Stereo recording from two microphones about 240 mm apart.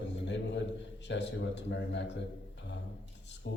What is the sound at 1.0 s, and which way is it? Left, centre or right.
Speech, left.